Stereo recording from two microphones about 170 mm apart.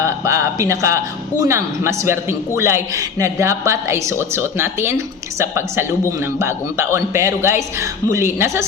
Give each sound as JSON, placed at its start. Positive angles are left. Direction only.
{"t": 0.0, "sound": "a man's voice", "side_deg": -15}